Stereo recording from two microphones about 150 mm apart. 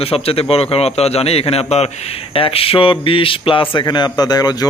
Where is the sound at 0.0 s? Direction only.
40° left (ahead or behind).